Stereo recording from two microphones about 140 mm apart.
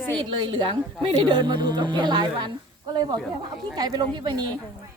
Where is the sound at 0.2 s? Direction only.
35° right (ahead or behind).